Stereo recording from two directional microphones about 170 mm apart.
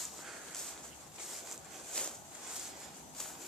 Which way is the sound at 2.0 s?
5° left (ahead or behind).